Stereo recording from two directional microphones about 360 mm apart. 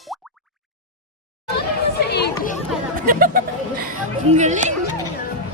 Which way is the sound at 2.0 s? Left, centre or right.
Left.